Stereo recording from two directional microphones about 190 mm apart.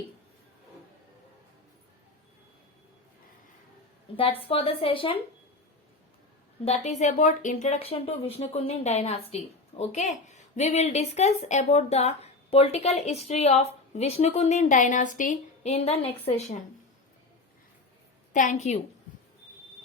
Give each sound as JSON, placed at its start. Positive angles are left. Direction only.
{"t": 4.2, "sound": "speech", "side_deg": 30}
{"t": 6.7, "sound": "speech", "side_deg": 35}
{"t": 18.3, "sound": "speech", "side_deg": 40}